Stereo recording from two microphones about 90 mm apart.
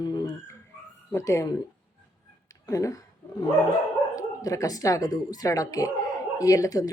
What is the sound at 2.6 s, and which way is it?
A woman's voice, 40° left (ahead or behind).